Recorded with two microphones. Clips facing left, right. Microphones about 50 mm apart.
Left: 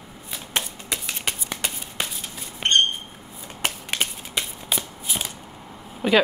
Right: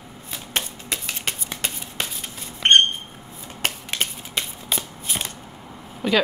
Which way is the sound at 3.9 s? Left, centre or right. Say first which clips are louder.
Even; centre.